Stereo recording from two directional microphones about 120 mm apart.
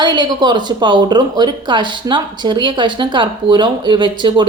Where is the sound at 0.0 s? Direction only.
40° right (ahead or behind).